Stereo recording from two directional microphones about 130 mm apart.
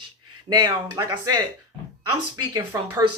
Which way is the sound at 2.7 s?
20° right (ahead or behind).